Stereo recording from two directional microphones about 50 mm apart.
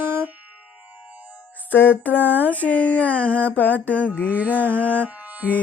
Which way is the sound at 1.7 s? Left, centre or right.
Left.